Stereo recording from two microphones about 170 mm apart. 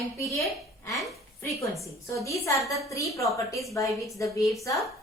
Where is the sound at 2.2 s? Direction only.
20° left (ahead or behind).